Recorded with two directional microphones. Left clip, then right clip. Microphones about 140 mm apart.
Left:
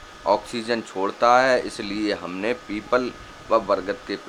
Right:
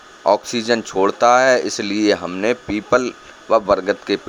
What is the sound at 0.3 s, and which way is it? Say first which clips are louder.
Speech: right 6 dB; 45° right (ahead or behind).